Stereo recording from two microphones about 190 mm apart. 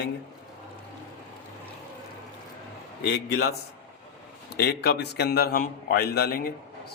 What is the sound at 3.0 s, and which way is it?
Speech, 60° left (ahead or behind).